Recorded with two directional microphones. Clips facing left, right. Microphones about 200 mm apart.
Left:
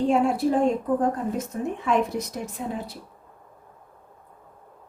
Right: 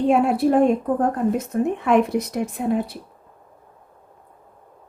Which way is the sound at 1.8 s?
60° right (ahead or behind).